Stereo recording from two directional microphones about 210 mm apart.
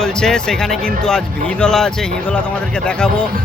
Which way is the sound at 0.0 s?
5° left (ahead or behind).